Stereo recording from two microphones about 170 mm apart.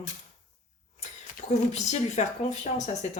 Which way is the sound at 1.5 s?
45° left (ahead or behind).